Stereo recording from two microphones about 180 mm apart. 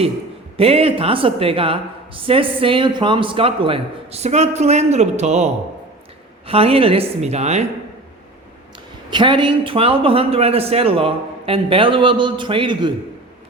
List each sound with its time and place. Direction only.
0.5 s speech: 30° right (ahead or behind)
6.5 s speech: 30° right (ahead or behind)
9.0 s a man's voice: 25° right (ahead or behind)